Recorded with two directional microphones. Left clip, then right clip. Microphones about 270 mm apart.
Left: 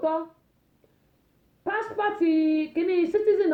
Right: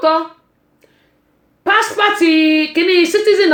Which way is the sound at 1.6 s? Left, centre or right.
Centre.